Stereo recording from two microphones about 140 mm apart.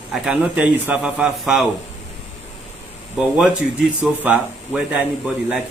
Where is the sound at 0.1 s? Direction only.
10° right (ahead or behind).